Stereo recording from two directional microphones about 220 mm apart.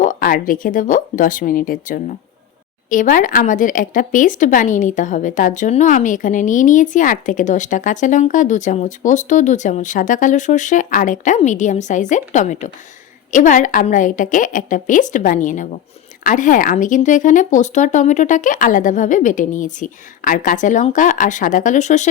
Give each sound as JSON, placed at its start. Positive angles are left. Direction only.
{"t": 0.0, "sound": "speech", "side_deg": 40}